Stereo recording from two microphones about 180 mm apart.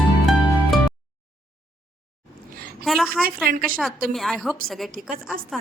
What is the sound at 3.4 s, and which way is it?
Speech, 50° right (ahead or behind).